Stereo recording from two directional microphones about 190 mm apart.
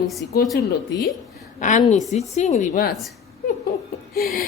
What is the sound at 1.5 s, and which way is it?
A woman's voice, 40° left (ahead or behind).